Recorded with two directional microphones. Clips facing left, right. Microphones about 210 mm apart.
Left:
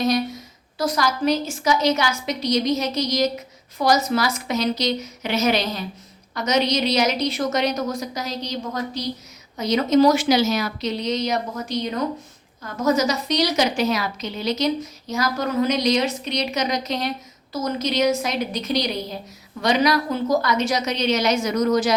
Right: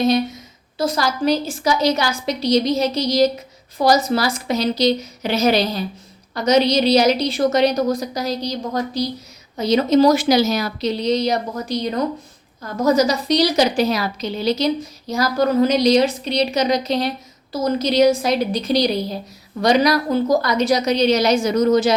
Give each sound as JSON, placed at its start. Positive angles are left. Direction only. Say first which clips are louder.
{"t": 0.8, "sound": "a woman's voice", "louder": "right 2 dB", "side_deg": -30}